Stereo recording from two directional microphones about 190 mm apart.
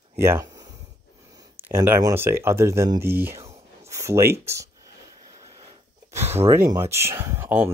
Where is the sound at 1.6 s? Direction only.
10° right (ahead or behind).